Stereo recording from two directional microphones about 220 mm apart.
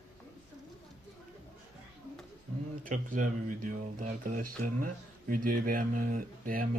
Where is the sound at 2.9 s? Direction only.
35° right (ahead or behind).